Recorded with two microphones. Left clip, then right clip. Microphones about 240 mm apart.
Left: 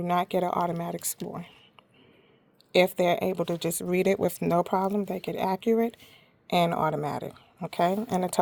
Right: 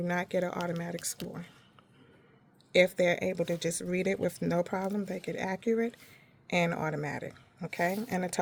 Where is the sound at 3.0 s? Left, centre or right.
Left.